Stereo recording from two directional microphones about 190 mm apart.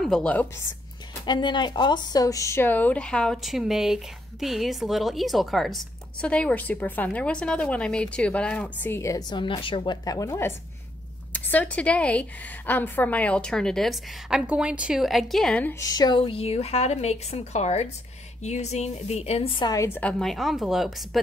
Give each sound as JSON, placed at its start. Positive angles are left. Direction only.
{"t": 0.0, "sound": "a woman's voice", "side_deg": 5}
{"t": 1.2, "sound": "a woman's voice", "side_deg": 25}
{"t": 15.8, "sound": "a woman's voice", "side_deg": 20}
{"t": 19.7, "sound": "a woman's voice", "side_deg": 15}